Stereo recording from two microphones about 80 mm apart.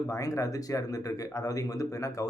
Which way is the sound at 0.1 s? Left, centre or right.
Left.